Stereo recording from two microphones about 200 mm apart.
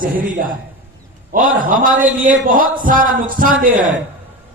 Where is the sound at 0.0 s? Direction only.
45° right (ahead or behind).